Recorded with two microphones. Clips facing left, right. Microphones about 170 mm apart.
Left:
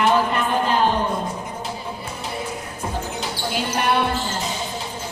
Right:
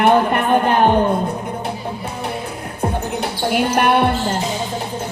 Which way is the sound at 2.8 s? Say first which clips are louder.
Right 8 dB; 60° right (ahead or behind).